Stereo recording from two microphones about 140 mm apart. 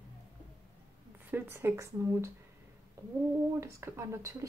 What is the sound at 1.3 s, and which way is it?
Speech, 15° right (ahead or behind).